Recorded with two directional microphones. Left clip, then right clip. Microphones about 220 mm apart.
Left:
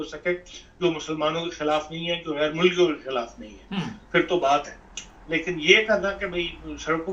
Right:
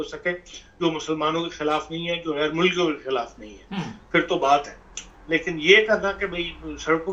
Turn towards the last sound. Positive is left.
turn(degrees=-25)  # may be behind; listen again after turning